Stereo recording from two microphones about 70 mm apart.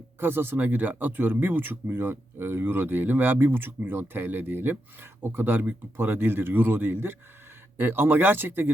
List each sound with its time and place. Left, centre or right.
0.2 s speech: right